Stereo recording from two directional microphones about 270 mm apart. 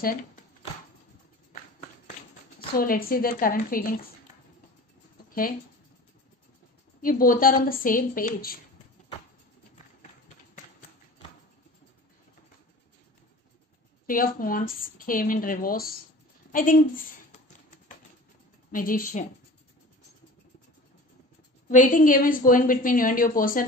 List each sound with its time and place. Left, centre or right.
1.5 s a sound: left
2.7 s a woman's voice: left
7.0 s a woman's voice: left
14.0 s a woman's voice: left
18.7 s a woman's voice: left
21.6 s a woman's voice: left